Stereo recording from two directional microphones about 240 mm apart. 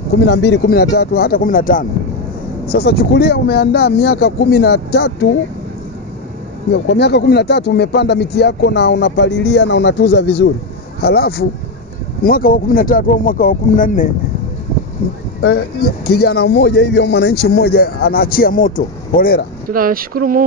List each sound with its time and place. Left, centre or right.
0.2 s a man's voice: left
6.7 s a man's voice: left
15.4 s a man's voice: left
19.7 s speech: right